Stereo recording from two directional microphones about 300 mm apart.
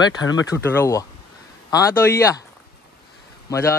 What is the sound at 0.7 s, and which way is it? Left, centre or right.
Speech, centre.